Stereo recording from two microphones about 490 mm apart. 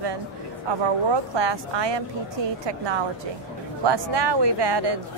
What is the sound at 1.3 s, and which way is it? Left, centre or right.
A woman's voice, right.